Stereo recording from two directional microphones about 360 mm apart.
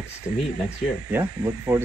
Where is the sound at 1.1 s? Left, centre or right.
Centre.